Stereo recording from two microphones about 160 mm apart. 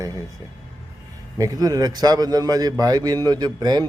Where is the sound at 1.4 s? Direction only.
20° right (ahead or behind).